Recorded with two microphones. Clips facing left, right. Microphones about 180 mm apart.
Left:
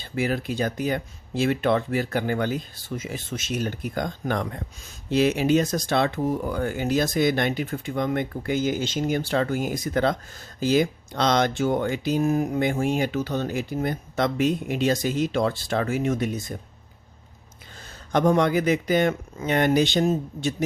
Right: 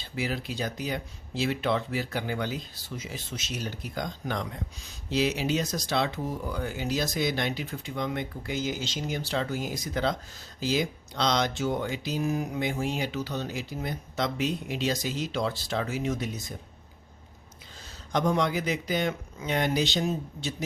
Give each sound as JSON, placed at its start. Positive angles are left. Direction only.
{"t": 0.0, "sound": "speech", "side_deg": 50}
{"t": 18.1, "sound": "speech", "side_deg": 55}